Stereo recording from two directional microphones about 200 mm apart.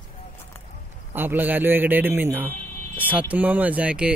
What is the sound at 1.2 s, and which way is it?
A man's voice, 10° right (ahead or behind).